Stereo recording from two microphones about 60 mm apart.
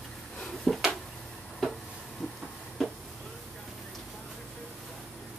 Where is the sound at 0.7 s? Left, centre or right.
Centre.